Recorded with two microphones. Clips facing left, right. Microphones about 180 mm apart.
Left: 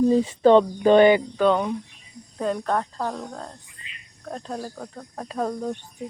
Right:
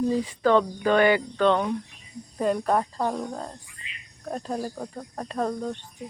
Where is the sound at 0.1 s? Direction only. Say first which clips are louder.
Left 5 dB; 25° left (ahead or behind).